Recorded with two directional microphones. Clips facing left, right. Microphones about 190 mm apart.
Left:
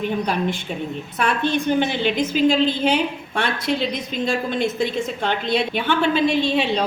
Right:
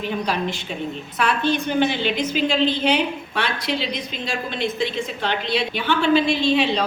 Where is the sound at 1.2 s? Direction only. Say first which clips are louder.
Even; 50° left (ahead or behind).